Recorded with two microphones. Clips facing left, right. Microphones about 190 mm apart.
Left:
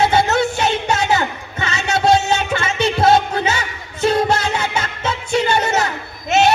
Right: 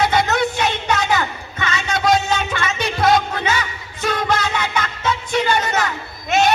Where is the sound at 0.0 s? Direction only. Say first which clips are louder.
Left 2 dB; 30° left (ahead or behind).